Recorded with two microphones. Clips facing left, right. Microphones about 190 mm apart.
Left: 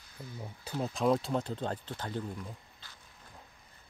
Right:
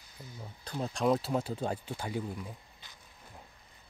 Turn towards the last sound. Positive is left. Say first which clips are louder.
# right 2 dB
turn(degrees=-15)  # may be behind; listen again after turning